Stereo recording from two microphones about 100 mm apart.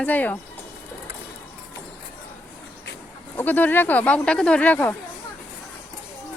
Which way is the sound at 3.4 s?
20° left (ahead or behind).